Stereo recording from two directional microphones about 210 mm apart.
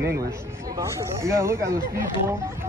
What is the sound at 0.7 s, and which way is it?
Speech, 15° right (ahead or behind).